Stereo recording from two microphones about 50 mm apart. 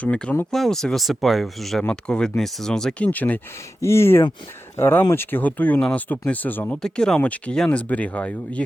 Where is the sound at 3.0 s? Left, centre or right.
Left.